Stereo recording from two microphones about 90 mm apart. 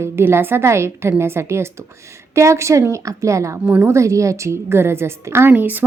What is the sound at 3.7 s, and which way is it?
A woman's voice, 25° right (ahead or behind).